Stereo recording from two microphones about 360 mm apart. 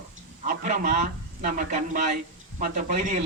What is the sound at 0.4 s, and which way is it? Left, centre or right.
A man's voice, right.